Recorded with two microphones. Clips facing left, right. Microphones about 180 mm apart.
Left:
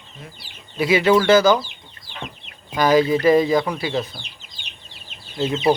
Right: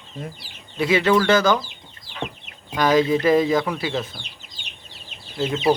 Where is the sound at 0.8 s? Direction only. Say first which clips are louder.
Left 2 dB; 10° left (ahead or behind).